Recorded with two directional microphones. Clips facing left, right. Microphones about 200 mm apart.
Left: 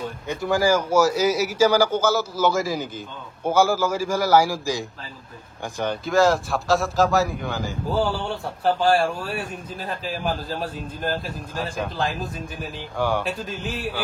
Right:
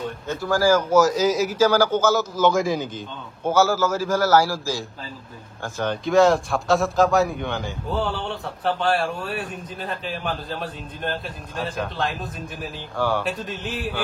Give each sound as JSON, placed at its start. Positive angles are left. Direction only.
{"t": 0.3, "sound": "a man's voice", "side_deg": 20}
{"t": 6.0, "sound": "a man's voice", "side_deg": 0}
{"t": 12.9, "sound": "a man's voice", "side_deg": 15}
{"t": 13.2, "sound": "a man's voice", "side_deg": 0}